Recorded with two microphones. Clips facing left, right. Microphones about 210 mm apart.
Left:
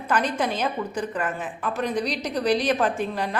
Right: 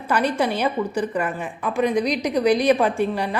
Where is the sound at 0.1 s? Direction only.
10° right (ahead or behind).